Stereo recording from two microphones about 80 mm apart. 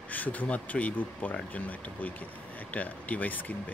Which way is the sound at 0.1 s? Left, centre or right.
Left.